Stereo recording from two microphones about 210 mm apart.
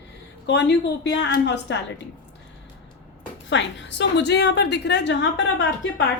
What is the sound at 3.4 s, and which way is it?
A woman's voice, 60° left (ahead or behind).